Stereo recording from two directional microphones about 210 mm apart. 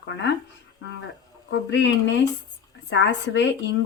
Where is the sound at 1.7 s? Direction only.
60° left (ahead or behind).